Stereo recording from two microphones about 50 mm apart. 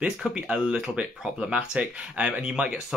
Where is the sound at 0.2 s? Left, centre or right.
Right.